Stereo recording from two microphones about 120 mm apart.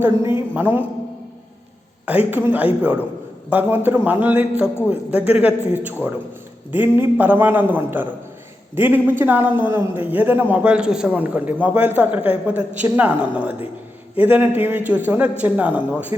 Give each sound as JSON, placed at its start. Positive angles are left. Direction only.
{"t": 0.3, "sound": "a man's voice", "side_deg": -15}
{"t": 2.0, "sound": "a man's voice", "side_deg": -15}